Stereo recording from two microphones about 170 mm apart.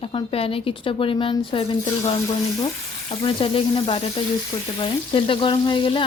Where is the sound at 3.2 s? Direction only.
30° left (ahead or behind).